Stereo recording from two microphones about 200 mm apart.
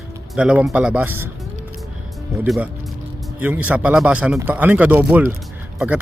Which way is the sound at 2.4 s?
Centre (ahead or behind).